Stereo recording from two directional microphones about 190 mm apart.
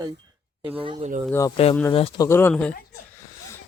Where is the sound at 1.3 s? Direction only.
15° left (ahead or behind).